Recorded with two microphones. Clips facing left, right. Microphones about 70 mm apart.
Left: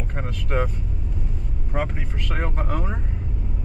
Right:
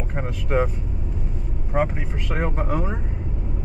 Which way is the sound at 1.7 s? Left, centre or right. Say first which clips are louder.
Right 4 dB; centre.